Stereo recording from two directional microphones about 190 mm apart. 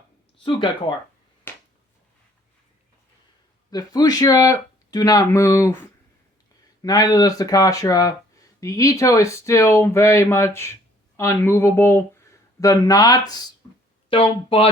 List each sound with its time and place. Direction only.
0.4 s speech: 25° left (ahead or behind)
1.5 s a sound: 10° left (ahead or behind)
3.7 s speech: 20° left (ahead or behind)